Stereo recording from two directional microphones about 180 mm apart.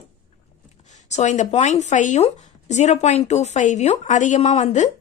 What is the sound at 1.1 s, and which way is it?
A woman's voice, 40° left (ahead or behind).